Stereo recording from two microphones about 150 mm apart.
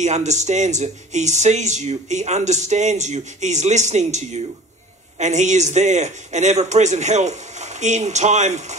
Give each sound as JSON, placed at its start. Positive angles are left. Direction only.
{"t": 0.0, "sound": "speech", "side_deg": -50}